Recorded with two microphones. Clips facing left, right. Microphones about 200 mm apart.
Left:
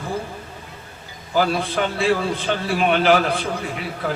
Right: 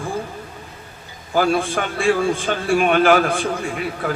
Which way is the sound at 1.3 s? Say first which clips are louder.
Right 2 dB; 50° right (ahead or behind).